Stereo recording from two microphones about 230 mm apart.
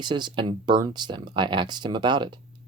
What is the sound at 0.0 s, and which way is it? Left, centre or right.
Speech, centre.